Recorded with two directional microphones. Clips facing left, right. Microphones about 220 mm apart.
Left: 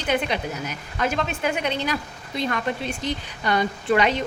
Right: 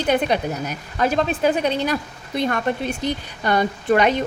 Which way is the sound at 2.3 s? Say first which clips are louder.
Right 4 dB; 50° right (ahead or behind).